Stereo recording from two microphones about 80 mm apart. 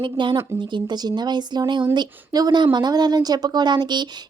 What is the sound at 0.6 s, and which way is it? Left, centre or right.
A woman's voice, right.